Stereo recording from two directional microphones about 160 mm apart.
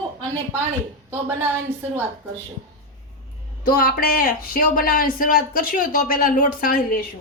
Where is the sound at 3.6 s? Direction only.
65° left (ahead or behind).